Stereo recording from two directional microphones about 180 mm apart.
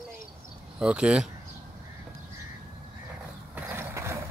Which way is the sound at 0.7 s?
5° right (ahead or behind).